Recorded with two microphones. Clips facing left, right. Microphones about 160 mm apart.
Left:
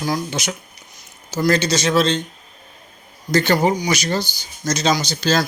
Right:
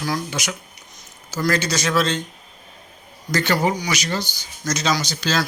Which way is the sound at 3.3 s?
30° left (ahead or behind).